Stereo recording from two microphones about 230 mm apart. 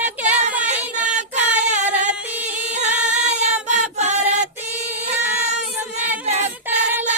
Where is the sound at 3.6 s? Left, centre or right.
Right.